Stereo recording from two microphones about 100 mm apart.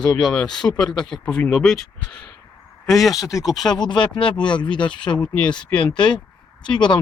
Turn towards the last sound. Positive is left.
turn(degrees=50)  # may be behind; listen again after turning